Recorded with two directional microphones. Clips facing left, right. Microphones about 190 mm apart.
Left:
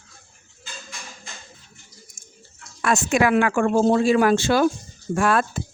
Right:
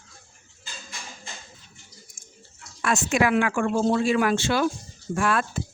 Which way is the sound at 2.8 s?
50° left (ahead or behind).